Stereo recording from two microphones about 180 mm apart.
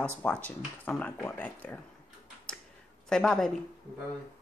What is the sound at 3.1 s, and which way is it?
Speech, 5° left (ahead or behind).